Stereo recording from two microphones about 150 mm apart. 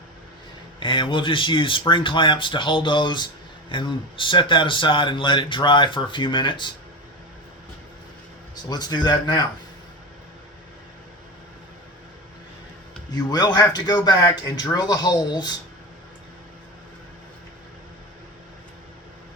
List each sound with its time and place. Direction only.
0.8 s speech: 35° left (ahead or behind)
8.7 s speech: 30° left (ahead or behind)
13.1 s speech: 25° left (ahead or behind)